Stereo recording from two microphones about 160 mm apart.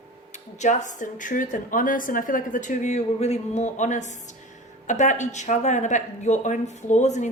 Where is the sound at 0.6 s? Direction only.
50° left (ahead or behind).